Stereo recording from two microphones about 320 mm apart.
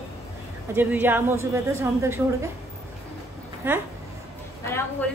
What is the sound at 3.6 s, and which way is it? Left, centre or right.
Speech, centre.